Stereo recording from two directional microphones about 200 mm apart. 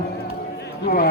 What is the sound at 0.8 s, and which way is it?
Speech, 50° left (ahead or behind).